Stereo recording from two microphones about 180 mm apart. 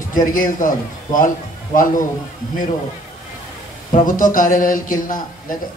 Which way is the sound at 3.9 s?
45° left (ahead or behind).